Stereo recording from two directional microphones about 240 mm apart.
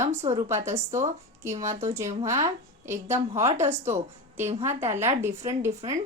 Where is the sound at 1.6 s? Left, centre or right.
Right.